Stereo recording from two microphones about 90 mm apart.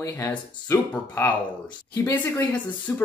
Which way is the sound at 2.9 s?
30° left (ahead or behind).